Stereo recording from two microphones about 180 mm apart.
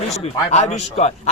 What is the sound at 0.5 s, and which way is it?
Speech, 40° left (ahead or behind).